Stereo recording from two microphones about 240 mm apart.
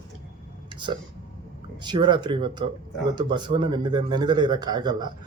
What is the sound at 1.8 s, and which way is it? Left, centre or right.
Speech, centre.